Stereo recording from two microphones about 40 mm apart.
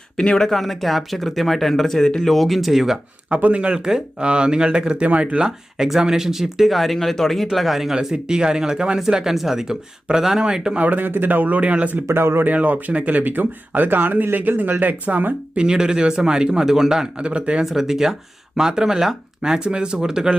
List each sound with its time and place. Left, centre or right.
0.2 s speech: centre
2.3 s speech: centre
3.2 s speech: right
3.8 s speech: right
5.0 s speech: right
5.4 s speech: centre
10.8 s speech: right
11.0 s speech: right
12.1 s speech: right
12.5 s speech: right
15.5 s speech: centre
17.2 s speech: right
17.7 s speech: centre